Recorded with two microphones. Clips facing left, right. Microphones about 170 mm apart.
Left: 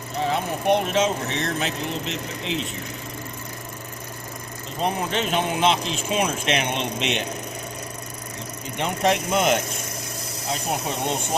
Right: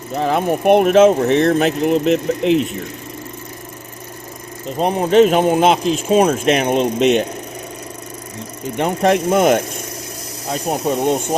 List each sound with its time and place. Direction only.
0.2 s speech: 55° right (ahead or behind)
4.8 s speech: 40° right (ahead or behind)
8.8 s speech: 50° right (ahead or behind)